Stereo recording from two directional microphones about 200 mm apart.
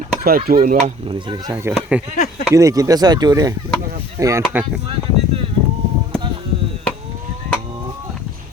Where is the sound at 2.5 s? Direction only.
15° right (ahead or behind).